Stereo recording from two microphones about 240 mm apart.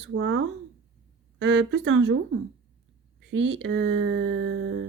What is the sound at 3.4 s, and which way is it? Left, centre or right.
Speech, right.